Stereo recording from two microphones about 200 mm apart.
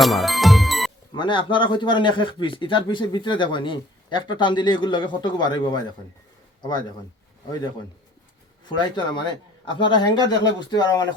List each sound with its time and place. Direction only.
0.0 s music: centre (ahead or behind)
1.1 s speech: 25° left (ahead or behind)
9.0 s speech: 20° left (ahead or behind)